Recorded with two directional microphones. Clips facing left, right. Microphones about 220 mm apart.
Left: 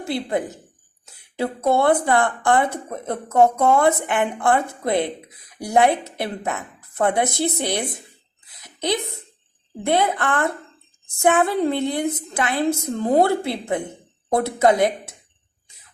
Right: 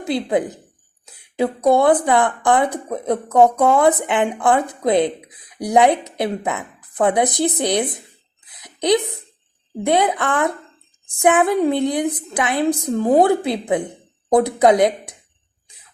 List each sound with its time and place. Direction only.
0.0 s speech: 20° right (ahead or behind)
8.4 s a sound: 20° right (ahead or behind)
9.8 s speech: 15° right (ahead or behind)